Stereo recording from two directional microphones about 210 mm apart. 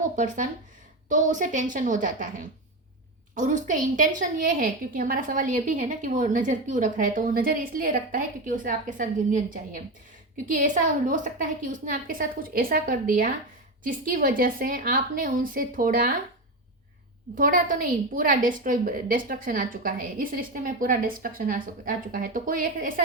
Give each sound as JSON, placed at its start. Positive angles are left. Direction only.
{"t": 1.0, "sound": "a woman's voice", "side_deg": -35}
{"t": 17.3, "sound": "a woman's voice", "side_deg": -40}